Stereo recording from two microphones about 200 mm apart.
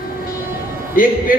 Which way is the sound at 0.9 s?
45° left (ahead or behind).